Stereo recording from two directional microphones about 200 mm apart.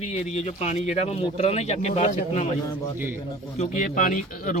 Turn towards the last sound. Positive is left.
turn(degrees=40)  # may be behind; listen again after turning